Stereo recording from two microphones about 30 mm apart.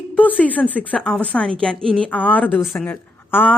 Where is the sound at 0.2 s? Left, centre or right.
Left.